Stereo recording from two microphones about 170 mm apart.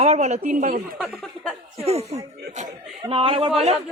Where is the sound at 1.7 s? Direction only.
40° right (ahead or behind).